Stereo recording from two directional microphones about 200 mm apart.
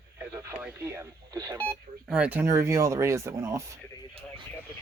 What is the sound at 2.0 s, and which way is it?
Speech, 5° right (ahead or behind).